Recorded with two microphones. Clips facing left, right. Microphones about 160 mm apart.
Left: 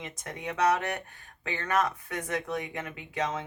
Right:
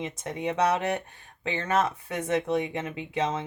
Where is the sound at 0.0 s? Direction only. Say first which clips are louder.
Right 7 dB; 25° right (ahead or behind).